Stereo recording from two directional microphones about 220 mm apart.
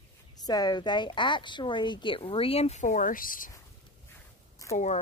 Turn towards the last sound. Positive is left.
turn(degrees=30)  # may be behind; listen again after turning